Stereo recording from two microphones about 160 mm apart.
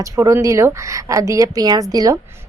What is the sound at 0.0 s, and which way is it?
A woman's voice, 20° right (ahead or behind).